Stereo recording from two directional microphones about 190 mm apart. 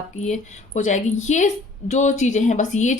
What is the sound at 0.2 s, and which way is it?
A woman's voice, 40° left (ahead or behind).